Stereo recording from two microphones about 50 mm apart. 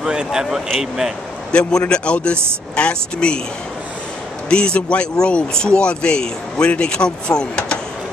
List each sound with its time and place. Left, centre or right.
0.0 s speech: centre
1.5 s speech: centre
4.5 s speech: centre